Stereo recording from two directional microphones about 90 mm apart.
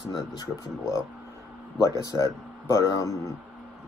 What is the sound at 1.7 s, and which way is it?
A man's voice, 35° left (ahead or behind).